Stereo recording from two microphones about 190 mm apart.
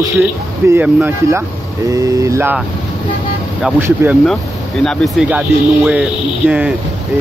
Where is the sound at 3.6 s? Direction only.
5° right (ahead or behind).